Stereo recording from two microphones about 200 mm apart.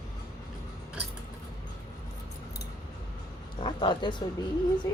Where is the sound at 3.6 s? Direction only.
25° left (ahead or behind).